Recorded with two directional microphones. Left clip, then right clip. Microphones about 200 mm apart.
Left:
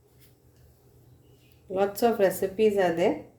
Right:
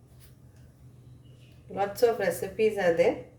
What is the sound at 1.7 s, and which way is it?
A woman's voice, 45° left (ahead or behind).